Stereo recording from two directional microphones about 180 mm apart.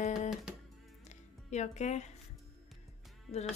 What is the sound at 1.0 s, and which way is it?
Music, 40° left (ahead or behind).